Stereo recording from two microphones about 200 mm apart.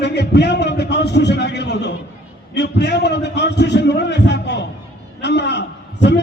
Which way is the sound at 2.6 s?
60° left (ahead or behind).